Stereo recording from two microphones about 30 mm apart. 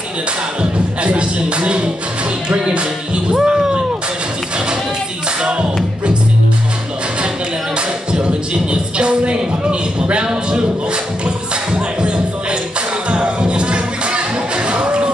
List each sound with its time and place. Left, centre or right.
0.6 s speech: right
2.5 s music: right
3.3 s a sound: centre
8.9 s music: right
11.2 s music: right
13.1 s music: right
14.7 s a sound: right